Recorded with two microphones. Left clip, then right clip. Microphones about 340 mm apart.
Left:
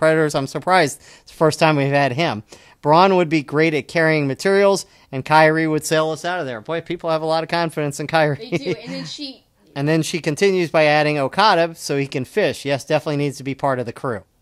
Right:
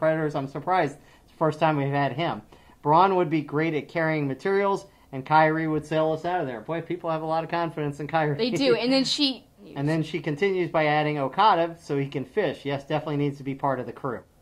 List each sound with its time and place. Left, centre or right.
0.0 s speech: left
8.7 s speech: right
9.8 s speech: left